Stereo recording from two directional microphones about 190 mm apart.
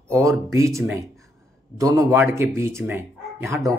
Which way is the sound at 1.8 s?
15° right (ahead or behind).